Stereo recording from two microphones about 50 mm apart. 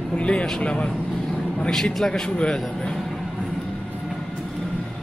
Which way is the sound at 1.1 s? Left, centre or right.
Centre.